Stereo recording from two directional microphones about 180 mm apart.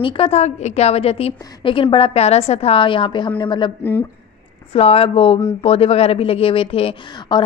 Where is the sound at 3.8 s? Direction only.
10° left (ahead or behind).